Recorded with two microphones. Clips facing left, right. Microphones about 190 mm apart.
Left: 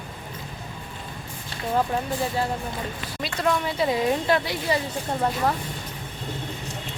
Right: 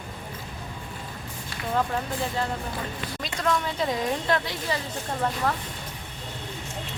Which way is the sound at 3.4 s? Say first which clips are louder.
Left 2 dB; 5° left (ahead or behind).